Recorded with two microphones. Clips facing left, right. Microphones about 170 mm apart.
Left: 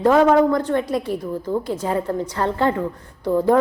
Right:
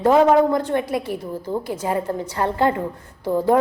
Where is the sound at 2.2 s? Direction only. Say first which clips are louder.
Even; 15° right (ahead or behind).